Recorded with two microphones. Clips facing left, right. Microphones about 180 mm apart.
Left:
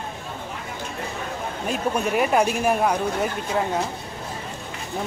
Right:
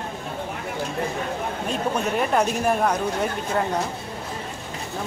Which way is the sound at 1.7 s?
10° left (ahead or behind).